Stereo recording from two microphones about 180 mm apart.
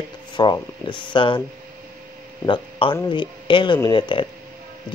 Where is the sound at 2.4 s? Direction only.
25° left (ahead or behind).